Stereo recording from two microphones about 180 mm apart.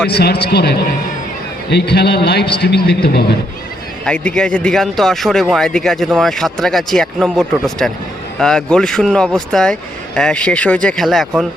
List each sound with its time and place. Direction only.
0.1 s a man's voice: 65° left (ahead or behind)
4.0 s a man's voice: 5° left (ahead or behind)